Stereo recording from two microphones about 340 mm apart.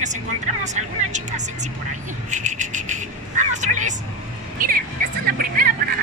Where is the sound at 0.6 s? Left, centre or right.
Right.